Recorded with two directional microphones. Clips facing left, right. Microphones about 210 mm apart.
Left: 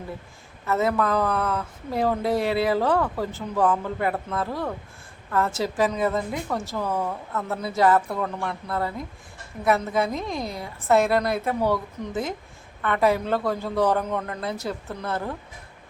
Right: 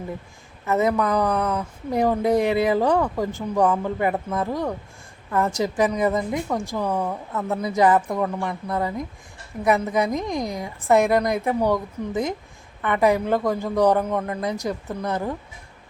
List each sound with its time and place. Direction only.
0.7 s speech: 15° right (ahead or behind)